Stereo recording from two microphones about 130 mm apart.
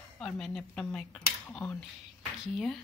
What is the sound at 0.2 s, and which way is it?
Speech, 5° left (ahead or behind).